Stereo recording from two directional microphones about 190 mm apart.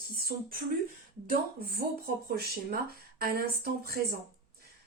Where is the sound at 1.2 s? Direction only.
50° right (ahead or behind).